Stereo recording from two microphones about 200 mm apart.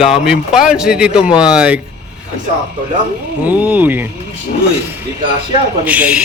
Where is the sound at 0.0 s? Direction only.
Centre (ahead or behind).